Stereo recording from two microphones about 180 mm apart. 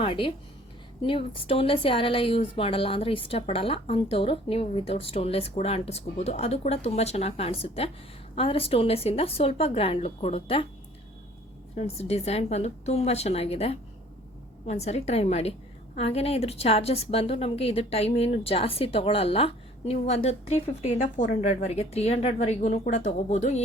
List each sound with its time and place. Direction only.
0.0 s a woman's voice: 30° left (ahead or behind)
11.8 s a woman's voice: 35° left (ahead or behind)